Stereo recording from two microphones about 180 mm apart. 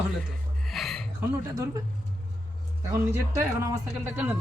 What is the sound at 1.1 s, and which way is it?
Speech, 20° right (ahead or behind).